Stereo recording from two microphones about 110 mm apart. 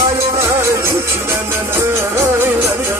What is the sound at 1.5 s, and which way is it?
Music, 20° right (ahead or behind).